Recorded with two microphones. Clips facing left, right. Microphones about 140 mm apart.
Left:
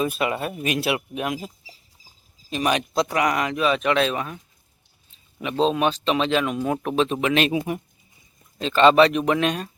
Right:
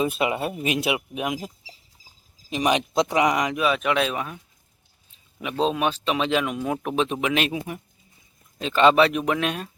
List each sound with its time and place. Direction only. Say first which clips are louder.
0.0 s speech: even; 20° right (ahead or behind)
2.5 s speech: right 1 dB; 20° right (ahead or behind)
5.4 s speech: left 2 dB; 10° right (ahead or behind)
8.5 s speech: left 2 dB; 10° right (ahead or behind)